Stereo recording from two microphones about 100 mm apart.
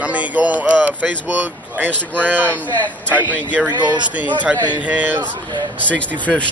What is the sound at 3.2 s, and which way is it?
Speech, 15° right (ahead or behind).